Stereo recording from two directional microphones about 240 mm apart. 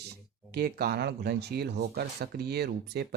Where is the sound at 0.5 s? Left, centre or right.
Right.